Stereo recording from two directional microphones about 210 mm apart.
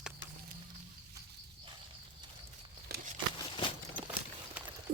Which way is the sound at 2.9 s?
45° right (ahead or behind).